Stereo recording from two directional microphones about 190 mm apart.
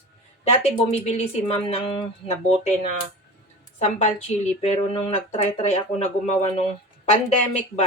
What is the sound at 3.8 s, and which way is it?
Speech, 35° left (ahead or behind).